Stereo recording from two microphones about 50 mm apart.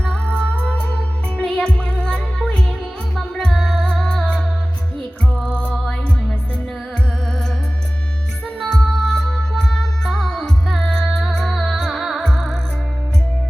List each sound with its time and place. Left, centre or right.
0.0 s music: left
4.2 s music: centre
5.5 s music: left
8.7 s music: centre